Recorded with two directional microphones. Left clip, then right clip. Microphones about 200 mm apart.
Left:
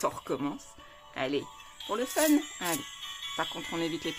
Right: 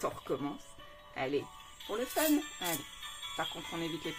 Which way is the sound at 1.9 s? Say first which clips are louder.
Left 5 dB; 35° left (ahead or behind).